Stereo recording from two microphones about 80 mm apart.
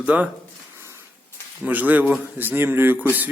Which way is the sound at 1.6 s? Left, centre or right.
Right.